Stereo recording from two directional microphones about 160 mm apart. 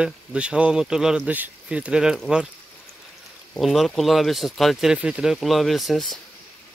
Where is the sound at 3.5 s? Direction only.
Centre (ahead or behind).